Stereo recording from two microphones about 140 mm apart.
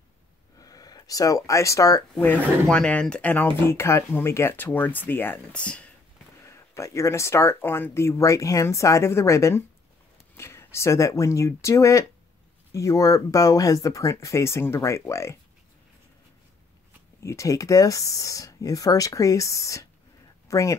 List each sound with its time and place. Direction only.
0.6 s speech: 25° left (ahead or behind)
2.7 s speech: 5° left (ahead or behind)
6.4 s speech: 20° left (ahead or behind)
17.2 s speech: 20° left (ahead or behind)